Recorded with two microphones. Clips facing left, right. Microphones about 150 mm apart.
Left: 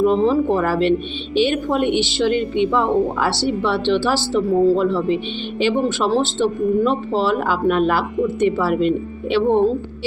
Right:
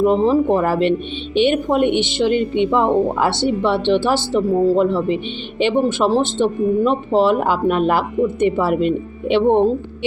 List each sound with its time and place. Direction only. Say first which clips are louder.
0.0 s speech: right 1 dB; 15° right (ahead or behind)